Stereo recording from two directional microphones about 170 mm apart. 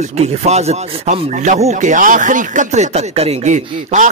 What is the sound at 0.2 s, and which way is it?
Speech, 40° right (ahead or behind).